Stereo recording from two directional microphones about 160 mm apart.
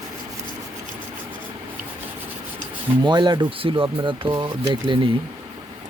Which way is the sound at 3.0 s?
30° right (ahead or behind).